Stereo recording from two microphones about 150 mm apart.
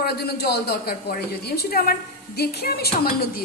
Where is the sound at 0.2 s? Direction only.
90° left.